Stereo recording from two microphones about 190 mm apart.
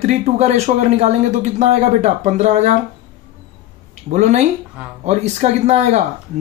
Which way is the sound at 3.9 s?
40° right (ahead or behind).